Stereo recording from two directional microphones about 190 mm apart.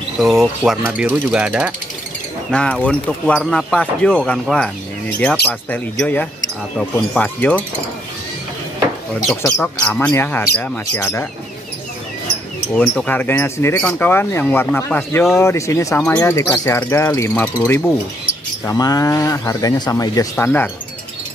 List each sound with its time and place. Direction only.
0.2 s mechanisms: centre (ahead or behind)
2.8 s speech: 5° left (ahead or behind)
9.3 s speech: 10° left (ahead or behind)
12.7 s speech: 10° left (ahead or behind)
16.0 s speech: 5° left (ahead or behind)